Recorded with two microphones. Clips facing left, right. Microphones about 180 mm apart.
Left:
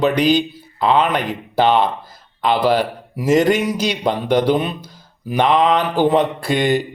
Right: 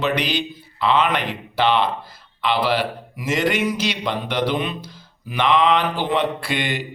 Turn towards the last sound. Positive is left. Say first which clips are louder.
# left 8 dB
turn(degrees=45)  # may be behind; listen again after turning